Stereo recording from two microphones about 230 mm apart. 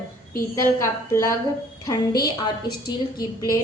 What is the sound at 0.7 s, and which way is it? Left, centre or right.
A woman's voice, centre.